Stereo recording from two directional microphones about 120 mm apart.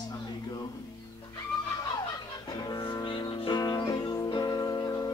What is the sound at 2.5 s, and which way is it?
Music, 35° left (ahead or behind).